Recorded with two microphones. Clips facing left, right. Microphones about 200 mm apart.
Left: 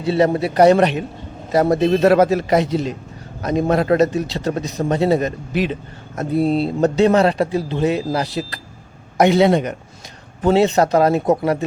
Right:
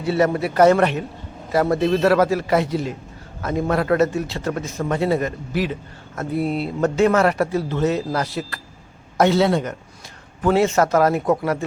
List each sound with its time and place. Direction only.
0.0 s a man's voice: 25° left (ahead or behind)
4.4 s a man's voice: 35° left (ahead or behind)